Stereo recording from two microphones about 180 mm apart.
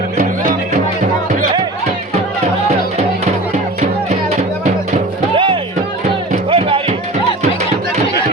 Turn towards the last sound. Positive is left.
turn(degrees=-30)  # may be behind; listen again after turning